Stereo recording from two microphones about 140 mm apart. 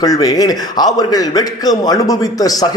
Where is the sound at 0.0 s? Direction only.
25° left (ahead or behind).